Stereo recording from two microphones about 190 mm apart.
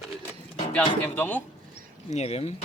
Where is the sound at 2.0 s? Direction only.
35° left (ahead or behind).